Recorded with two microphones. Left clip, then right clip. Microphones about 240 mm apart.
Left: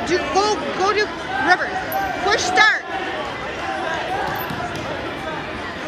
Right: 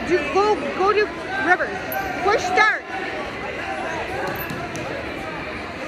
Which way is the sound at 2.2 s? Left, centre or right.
Centre.